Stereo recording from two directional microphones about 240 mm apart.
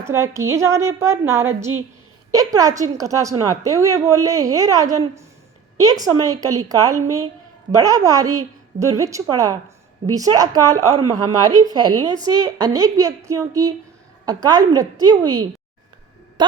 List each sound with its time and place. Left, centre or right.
0.0 s a woman's voice: centre